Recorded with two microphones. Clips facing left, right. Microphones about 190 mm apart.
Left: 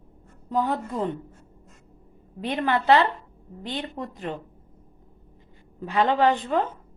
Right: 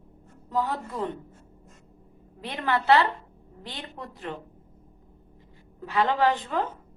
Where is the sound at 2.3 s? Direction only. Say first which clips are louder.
Left 3 dB; 20° left (ahead or behind).